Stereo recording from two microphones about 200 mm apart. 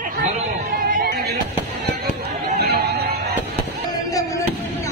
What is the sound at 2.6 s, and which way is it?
Music, 55° right (ahead or behind).